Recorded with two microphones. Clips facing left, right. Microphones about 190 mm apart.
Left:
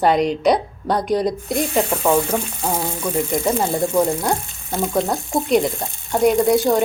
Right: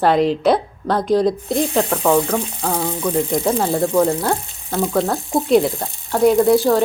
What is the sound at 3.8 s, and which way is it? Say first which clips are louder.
Speech: right 2 dB; 15° left (ahead or behind).